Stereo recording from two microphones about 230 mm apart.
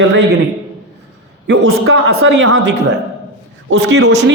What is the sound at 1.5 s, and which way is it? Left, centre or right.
A man's voice, right.